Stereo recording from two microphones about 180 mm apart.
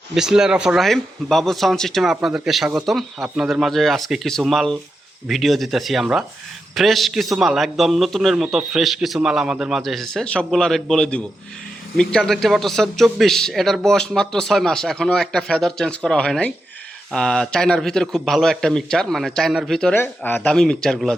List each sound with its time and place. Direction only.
0.1 s a man's voice: 5° right (ahead or behind)